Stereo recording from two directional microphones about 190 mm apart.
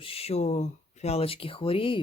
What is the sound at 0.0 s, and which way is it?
Speech, 30° left (ahead or behind).